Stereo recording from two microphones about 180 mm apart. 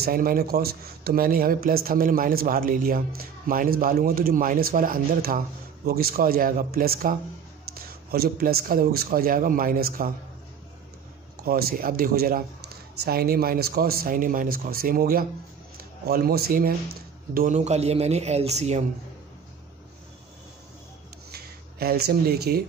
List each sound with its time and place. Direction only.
0.0 s speech: 50° right (ahead or behind)
11.4 s a man's voice: 55° right (ahead or behind); by 18.9 s 40° right (ahead or behind)
21.3 s a sound: 60° right (ahead or behind)